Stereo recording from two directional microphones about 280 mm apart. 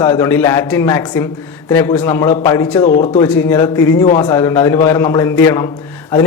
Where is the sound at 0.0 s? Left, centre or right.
Centre.